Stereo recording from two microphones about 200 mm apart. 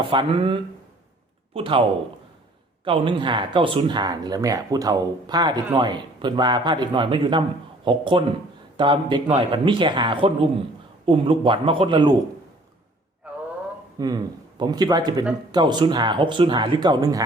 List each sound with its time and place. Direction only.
0.0 s speech: 25° right (ahead or behind)
2.8 s speech: 25° right (ahead or behind)
13.2 s a sound: 5° right (ahead or behind)
14.0 s speech: 20° right (ahead or behind)